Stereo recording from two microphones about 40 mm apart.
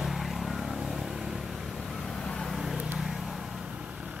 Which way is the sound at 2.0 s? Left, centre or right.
Centre.